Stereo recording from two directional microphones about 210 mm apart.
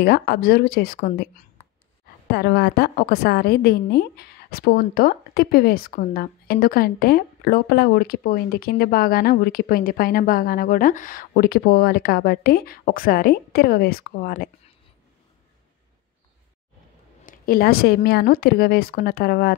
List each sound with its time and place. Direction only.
0.0 s a woman's voice: 45° left (ahead or behind)
17.3 s a woman's voice: 45° left (ahead or behind)